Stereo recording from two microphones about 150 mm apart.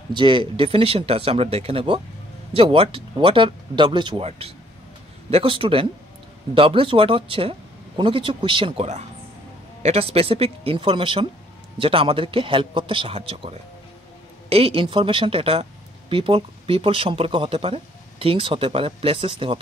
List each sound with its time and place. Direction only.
0.1 s speech: 35° right (ahead or behind)
9.8 s speech: 40° right (ahead or behind)